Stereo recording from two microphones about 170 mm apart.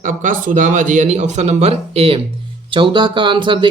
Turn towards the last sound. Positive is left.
turn(degrees=-30)  # may be behind; listen again after turning